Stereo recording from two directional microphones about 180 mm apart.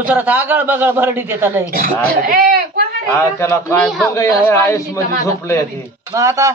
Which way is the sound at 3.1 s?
15° left (ahead or behind).